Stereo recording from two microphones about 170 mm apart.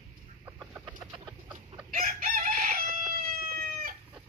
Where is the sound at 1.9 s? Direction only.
55° right (ahead or behind).